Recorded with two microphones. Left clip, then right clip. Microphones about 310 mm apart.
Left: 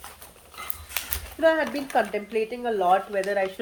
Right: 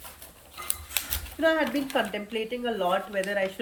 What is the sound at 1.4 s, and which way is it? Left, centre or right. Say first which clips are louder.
Speech: left 3 dB; left.